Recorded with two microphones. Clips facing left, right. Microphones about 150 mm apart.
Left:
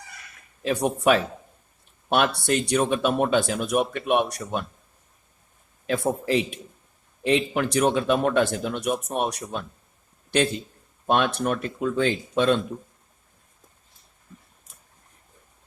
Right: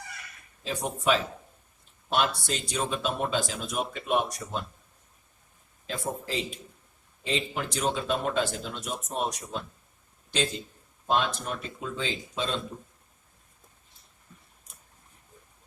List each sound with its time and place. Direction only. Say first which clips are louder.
0.6 s speech: left 7 dB; 65° left (ahead or behind)
5.8 s speech: left 9 dB; 65° left (ahead or behind)
11.0 s speech: left 5 dB; 65° left (ahead or behind)